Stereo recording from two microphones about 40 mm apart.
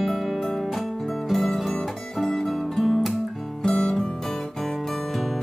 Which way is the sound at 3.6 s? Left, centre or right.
Centre.